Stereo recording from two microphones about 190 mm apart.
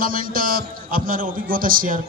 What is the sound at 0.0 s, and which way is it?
A man's voice, 50° right (ahead or behind).